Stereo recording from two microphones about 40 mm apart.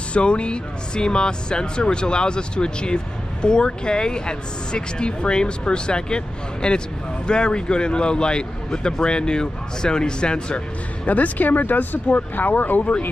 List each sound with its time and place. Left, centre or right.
0.1 s speech: left
11.1 s speech: left